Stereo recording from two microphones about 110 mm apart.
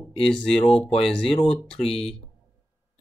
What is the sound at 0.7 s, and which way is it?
Speech, 60° left (ahead or behind).